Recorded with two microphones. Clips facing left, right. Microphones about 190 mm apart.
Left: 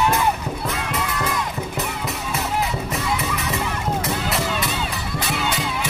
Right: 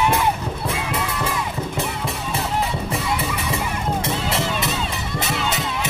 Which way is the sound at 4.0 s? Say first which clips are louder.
Right 1 dB; 25° right (ahead or behind).